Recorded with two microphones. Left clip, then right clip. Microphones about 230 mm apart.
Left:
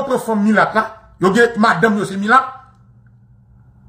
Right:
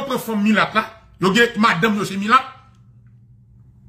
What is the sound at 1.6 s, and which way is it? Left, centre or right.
Speech, centre.